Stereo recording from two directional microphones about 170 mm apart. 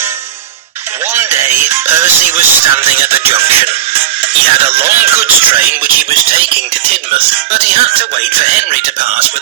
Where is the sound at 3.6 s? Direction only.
35° right (ahead or behind).